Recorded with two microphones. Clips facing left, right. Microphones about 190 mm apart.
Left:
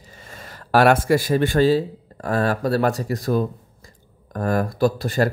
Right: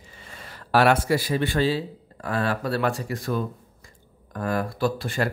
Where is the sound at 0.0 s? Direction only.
40° left (ahead or behind).